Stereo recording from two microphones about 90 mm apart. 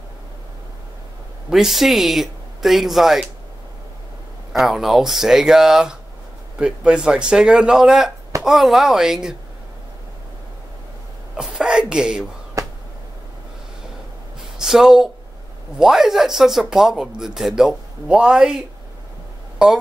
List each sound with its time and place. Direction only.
1.5 s speech: 5° right (ahead or behind)
4.5 s speech: 5° right (ahead or behind)
11.3 s a sound: 10° right (ahead or behind)
12.6 s a sound: 40° right (ahead or behind)
14.6 s speech: 5° right (ahead or behind)
19.6 s speech: 10° right (ahead or behind)